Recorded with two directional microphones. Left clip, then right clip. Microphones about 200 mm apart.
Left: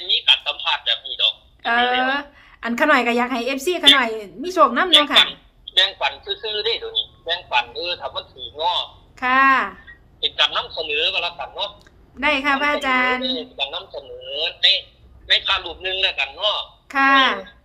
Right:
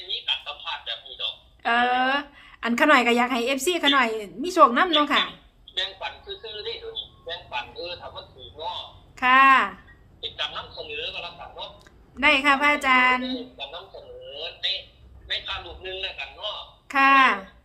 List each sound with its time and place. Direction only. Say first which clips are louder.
0.1 s telephone: left 11 dB; 55° left (ahead or behind)
1.6 s a woman's voice: left 3 dB; centre (ahead or behind)
5.7 s a man's voice: left 11 dB; 55° left (ahead or behind)
9.1 s a woman's voice: even; centre (ahead or behind)
10.2 s a man's voice: left 11 dB; 55° left (ahead or behind)
12.1 s a woman's voice: even; centre (ahead or behind)
13.3 s a man's voice: left 9 dB; 55° left (ahead or behind)
16.9 s a woman's voice: left 2 dB; centre (ahead or behind)